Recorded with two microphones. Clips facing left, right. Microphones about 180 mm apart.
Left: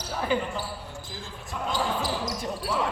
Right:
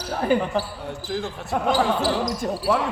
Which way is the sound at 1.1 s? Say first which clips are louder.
Right 12 dB; 70° right (ahead or behind).